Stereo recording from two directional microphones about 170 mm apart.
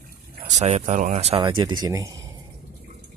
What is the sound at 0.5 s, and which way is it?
Speech, 40° right (ahead or behind).